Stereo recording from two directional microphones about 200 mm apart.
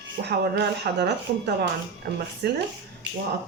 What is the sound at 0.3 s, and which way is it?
Speech, 55° right (ahead or behind).